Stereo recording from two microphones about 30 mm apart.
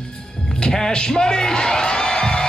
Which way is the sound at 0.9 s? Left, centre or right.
Left.